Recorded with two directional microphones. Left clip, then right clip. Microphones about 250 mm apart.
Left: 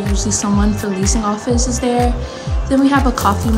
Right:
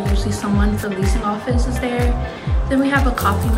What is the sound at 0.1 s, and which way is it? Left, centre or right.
A woman's voice, centre.